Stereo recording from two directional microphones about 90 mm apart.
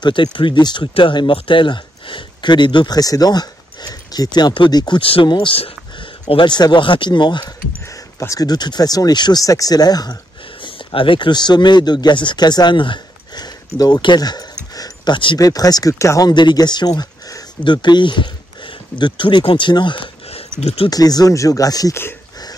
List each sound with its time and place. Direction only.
0.0 s speech: 65° left (ahead or behind)
0.9 s speech: 70° left (ahead or behind)
3.0 s speech: 45° left (ahead or behind); by 5.7 s 75° left (ahead or behind)
6.2 s speech: 65° left (ahead or behind)
8.2 s speech: 40° left (ahead or behind)
10.6 s speech: 75° left (ahead or behind); by 14.4 s 50° left (ahead or behind)
14.8 s a sound: 60° left (ahead or behind)
15.3 s speech: 45° left (ahead or behind)
16.3 s speech: 55° left (ahead or behind); by 20.4 s 80° left
20.9 s speech: 45° left (ahead or behind)